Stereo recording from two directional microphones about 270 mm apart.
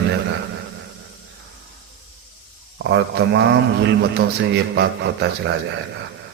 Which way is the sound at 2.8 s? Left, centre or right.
Right.